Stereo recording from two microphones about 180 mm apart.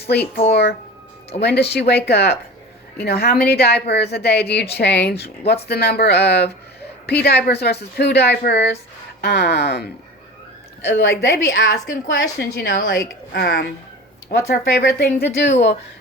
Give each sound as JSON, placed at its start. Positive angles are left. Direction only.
{"t": 0.1, "sound": "a woman's voice", "side_deg": 65}
{"t": 10.8, "sound": "a woman's voice", "side_deg": 65}